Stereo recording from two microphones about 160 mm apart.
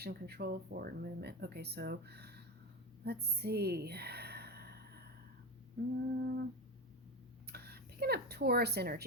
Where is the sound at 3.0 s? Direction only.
90° right.